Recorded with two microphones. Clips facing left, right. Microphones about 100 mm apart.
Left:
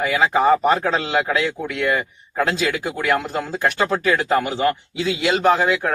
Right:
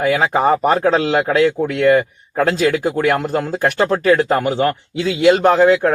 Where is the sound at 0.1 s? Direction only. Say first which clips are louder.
Even; 45° right (ahead or behind).